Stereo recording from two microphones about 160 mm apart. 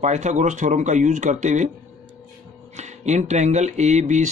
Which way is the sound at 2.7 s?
45° right (ahead or behind).